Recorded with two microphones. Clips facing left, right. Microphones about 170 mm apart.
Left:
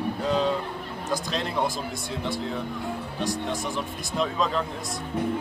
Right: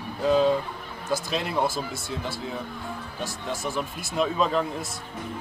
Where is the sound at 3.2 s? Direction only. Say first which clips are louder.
Left 3 dB; 5° right (ahead or behind).